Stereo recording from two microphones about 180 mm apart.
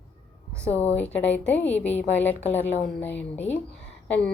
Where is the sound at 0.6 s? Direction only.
10° left (ahead or behind).